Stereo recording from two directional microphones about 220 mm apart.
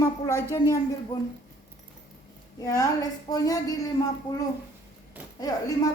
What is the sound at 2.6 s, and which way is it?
A woman's voice, 15° left (ahead or behind).